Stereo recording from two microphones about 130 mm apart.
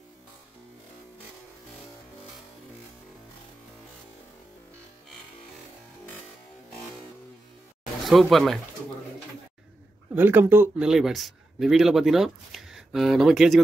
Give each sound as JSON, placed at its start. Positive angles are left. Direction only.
{"t": 8.0, "sound": "speech", "side_deg": 0}
{"t": 10.1, "sound": "speech", "side_deg": -15}
{"t": 10.8, "sound": "speech", "side_deg": -5}